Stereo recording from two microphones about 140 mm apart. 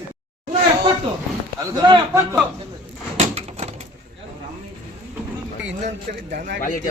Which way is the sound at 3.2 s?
50° right (ahead or behind).